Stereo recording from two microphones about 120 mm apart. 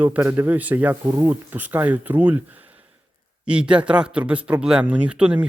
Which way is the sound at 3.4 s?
10° right (ahead or behind).